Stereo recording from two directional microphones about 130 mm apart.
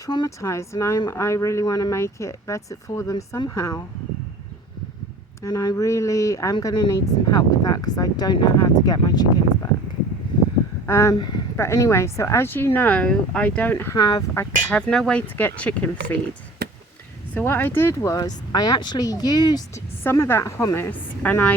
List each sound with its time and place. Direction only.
0.0 s speech: 30° left (ahead or behind)
5.4 s speech: 30° left (ahead or behind)
10.8 s speech: 20° left (ahead or behind)
11.2 s speech: 35° left (ahead or behind)
11.5 s speech: 20° left (ahead or behind)
14.7 s speech: 10° left (ahead or behind)
17.3 s speech: 15° left (ahead or behind); by 19.8 s 30° left (ahead or behind)
20.1 s speech: 20° left (ahead or behind)